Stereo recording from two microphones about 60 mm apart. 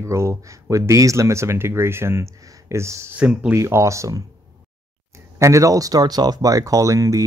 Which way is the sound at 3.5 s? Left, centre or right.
Right.